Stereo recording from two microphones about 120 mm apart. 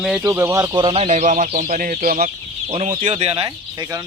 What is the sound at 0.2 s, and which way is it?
Speech, 20° right (ahead or behind).